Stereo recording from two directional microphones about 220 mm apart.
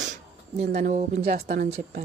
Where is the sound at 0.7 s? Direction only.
35° right (ahead or behind).